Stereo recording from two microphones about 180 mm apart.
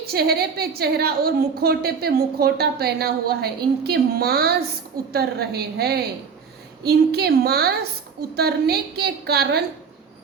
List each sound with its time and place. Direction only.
0.1 s a woman's voice: 60° right (ahead or behind)